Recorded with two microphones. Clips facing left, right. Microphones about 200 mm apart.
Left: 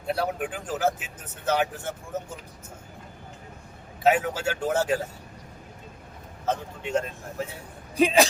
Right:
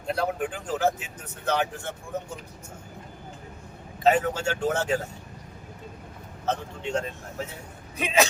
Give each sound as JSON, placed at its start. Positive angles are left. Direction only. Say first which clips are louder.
{"t": 0.0, "sound": "speech", "louder": "even", "side_deg": 5}
{"t": 4.0, "sound": "speech", "louder": "even", "side_deg": 5}
{"t": 6.4, "sound": "speech", "louder": "even", "side_deg": 5}
{"t": 7.9, "sound": "speech", "louder": "left 4 dB", "side_deg": 35}